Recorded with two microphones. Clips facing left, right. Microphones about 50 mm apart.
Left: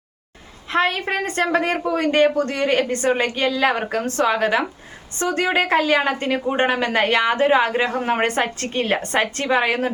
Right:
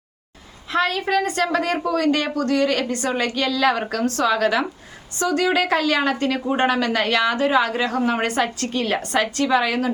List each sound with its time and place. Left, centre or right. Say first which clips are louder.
0.7 s a woman's voice: even; left